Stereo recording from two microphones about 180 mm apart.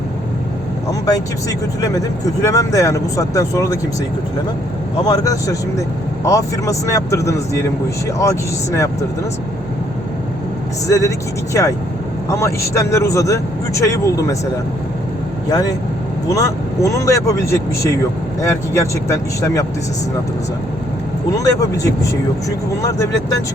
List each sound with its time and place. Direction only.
1.0 s speech: 20° left (ahead or behind)
5.0 s speech: 20° left (ahead or behind)
10.8 s speech: 15° left (ahead or behind)
15.4 s speech: 20° left (ahead or behind)
21.3 s speech: 20° left (ahead or behind)